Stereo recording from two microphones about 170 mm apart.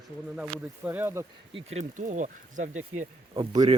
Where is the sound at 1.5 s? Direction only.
40° right (ahead or behind).